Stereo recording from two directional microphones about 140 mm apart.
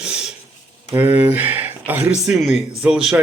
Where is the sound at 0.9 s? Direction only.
15° right (ahead or behind).